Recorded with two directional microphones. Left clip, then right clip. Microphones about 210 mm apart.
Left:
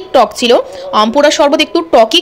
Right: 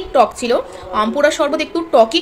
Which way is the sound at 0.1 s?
40° left (ahead or behind).